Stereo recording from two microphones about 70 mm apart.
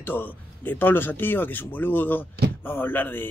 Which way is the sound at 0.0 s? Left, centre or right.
Left.